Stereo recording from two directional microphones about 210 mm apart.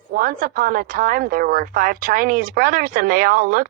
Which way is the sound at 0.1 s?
45° right (ahead or behind).